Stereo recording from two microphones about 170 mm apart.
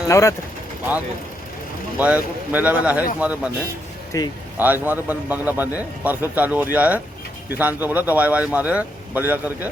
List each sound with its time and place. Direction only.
0.1 s speech: 15° left (ahead or behind)
2.0 s speech: 10° right (ahead or behind)
4.1 s speech: 20° left (ahead or behind)
4.5 s speech: 10° right (ahead or behind)